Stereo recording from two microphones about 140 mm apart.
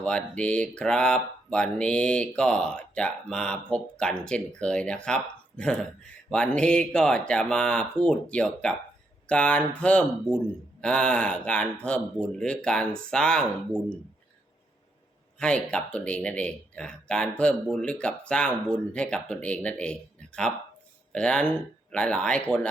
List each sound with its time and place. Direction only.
0.0 s speech: 10° left (ahead or behind)
15.4 s speech: 5° left (ahead or behind)